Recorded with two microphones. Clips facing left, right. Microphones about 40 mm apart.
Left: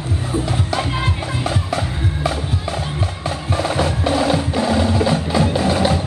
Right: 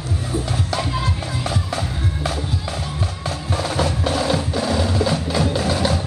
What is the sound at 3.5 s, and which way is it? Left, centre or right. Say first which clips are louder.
Music: left 2 dB; left.